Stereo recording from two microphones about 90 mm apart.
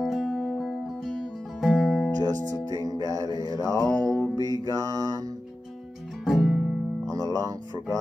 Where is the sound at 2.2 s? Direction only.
45° right (ahead or behind).